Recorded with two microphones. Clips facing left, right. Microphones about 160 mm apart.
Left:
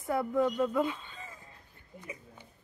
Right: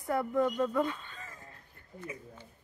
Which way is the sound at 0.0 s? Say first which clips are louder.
Left 1 dB; centre (ahead or behind).